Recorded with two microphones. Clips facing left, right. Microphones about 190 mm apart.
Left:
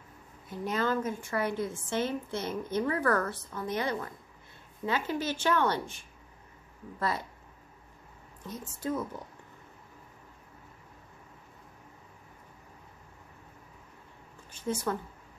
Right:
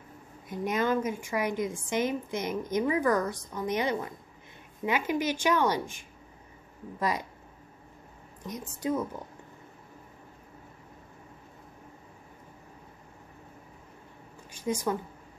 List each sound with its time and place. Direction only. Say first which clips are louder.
0.5 s a woman's voice: right 3 dB; 15° right (ahead or behind)
8.5 s a woman's voice: right 3 dB; 15° right (ahead or behind)
14.5 s speech: right 2 dB; 15° right (ahead or behind)